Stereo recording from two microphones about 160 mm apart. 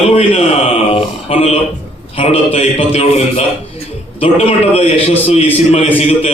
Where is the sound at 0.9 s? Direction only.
40° left (ahead or behind).